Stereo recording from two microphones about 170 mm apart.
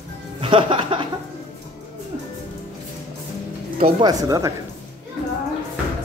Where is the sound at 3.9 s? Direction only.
30° right (ahead or behind).